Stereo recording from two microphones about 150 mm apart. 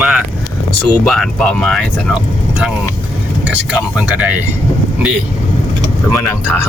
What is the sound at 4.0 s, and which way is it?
Speech, 10° right (ahead or behind).